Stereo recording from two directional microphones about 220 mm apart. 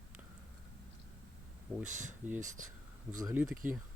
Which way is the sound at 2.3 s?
35° right (ahead or behind).